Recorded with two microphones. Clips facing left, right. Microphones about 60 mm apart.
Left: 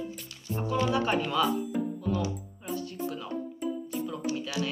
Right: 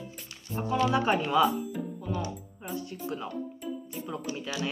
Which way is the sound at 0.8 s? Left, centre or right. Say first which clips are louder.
Right 2 dB; centre.